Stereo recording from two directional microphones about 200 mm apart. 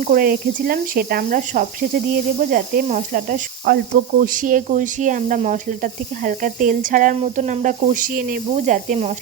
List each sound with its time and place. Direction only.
0.1 s speech: 45° right (ahead or behind)
2.5 s snake: 40° right (ahead or behind)